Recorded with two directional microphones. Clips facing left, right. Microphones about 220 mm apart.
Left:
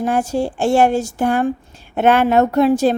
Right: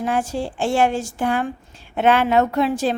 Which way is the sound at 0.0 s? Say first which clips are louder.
Left 4 dB; 45° left (ahead or behind).